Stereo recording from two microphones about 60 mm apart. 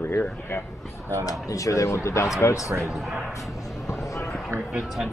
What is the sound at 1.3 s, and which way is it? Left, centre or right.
Speech, left.